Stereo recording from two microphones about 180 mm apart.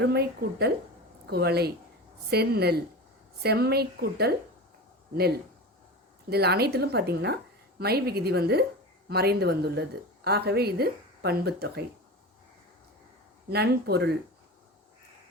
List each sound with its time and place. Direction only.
0.0 s speech: 65° right (ahead or behind)
13.5 s speech: 65° right (ahead or behind)